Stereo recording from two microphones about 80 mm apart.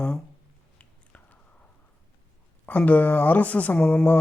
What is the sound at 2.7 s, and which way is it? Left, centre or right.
Speech, centre.